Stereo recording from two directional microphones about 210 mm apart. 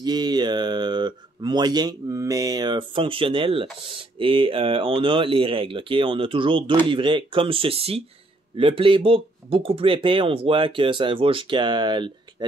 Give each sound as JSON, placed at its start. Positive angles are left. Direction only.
{"t": 0.0, "sound": "speech", "side_deg": -20}